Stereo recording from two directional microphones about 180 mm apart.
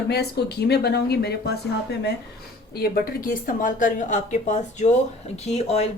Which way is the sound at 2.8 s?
55° left (ahead or behind).